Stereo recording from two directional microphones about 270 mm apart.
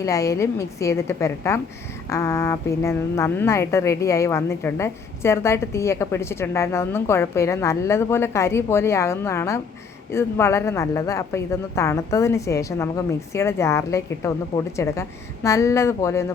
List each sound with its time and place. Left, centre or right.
0.0 s a woman's voice: centre